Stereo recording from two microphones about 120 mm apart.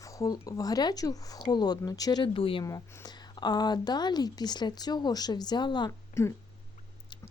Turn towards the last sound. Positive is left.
turn(degrees=25)  # may be behind; listen again after turning